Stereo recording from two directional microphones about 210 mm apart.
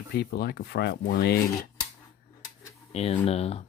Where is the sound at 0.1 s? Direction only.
50° left (ahead or behind).